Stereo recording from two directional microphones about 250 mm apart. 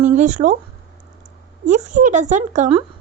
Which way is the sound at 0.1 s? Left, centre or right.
Right.